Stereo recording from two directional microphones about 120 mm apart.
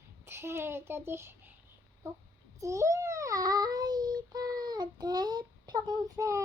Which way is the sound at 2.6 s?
25° right (ahead or behind).